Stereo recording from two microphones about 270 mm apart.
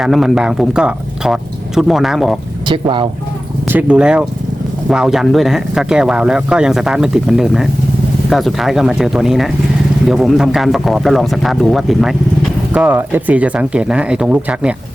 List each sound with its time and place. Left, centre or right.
0.0 s speech: centre
2.6 s speech: centre
3.7 s speech: centre